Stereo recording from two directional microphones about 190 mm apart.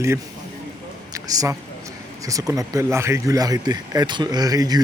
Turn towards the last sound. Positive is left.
turn(degrees=-20)  # may be behind; listen again after turning